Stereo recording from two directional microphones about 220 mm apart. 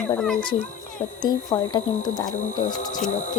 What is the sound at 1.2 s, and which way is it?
Speech, 20° left (ahead or behind).